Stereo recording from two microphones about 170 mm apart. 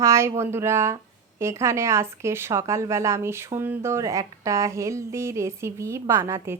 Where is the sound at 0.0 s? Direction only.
15° right (ahead or behind).